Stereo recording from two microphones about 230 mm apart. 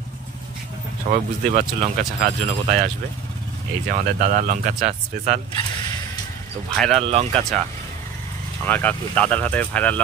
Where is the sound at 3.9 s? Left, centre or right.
Right.